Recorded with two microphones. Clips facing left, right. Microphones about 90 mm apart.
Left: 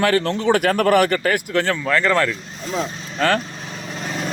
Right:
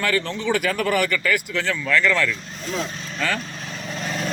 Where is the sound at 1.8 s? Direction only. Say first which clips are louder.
Even; 40° left (ahead or behind).